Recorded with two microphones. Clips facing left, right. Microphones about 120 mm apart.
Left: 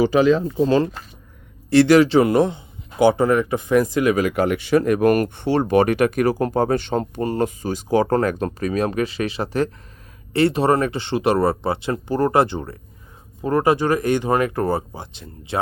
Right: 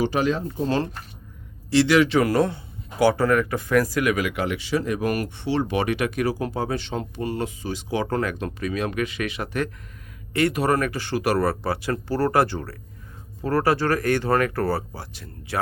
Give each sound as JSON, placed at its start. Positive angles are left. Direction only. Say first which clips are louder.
{"t": 1.7, "sound": "speech", "louder": "left 5 dB", "side_deg": 45}